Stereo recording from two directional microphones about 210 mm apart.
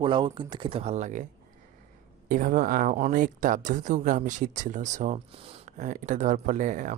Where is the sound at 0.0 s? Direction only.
25° right (ahead or behind).